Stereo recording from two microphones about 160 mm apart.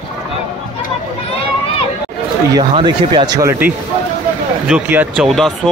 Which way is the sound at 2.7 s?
30° right (ahead or behind).